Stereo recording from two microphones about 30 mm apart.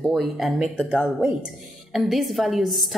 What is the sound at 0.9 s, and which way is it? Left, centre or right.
Speech, right.